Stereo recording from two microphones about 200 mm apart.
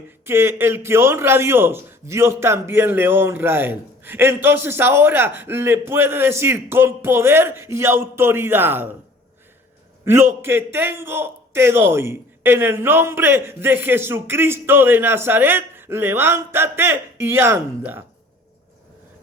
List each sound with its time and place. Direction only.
0.3 s a man's voice: 10° right (ahead or behind)
10.0 s a man's voice: 15° right (ahead or behind)